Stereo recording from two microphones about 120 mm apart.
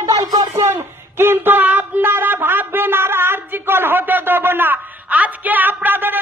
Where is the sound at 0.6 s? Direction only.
20° right (ahead or behind).